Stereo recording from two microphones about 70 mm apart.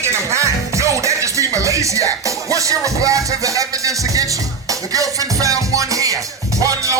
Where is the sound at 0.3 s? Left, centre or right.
Right.